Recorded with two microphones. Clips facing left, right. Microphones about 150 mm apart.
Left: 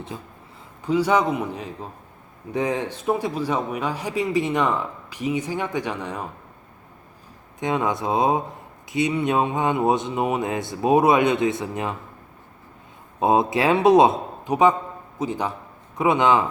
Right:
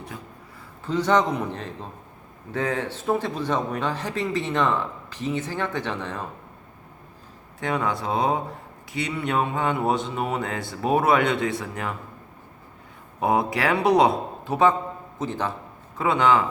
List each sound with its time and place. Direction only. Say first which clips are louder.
0.9 s a man's voice: left 1 dB; 10° left (ahead or behind)
7.6 s speech: left 2 dB; 20° left (ahead or behind)
13.1 s a man's voice: left 3 dB; 25° left (ahead or behind)